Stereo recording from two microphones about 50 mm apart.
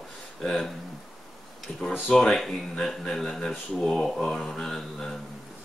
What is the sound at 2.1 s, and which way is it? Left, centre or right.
Speech, centre.